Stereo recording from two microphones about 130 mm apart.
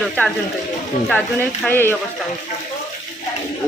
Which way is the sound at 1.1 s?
15° left (ahead or behind).